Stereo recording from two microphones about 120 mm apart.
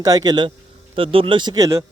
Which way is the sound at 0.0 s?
35° right (ahead or behind).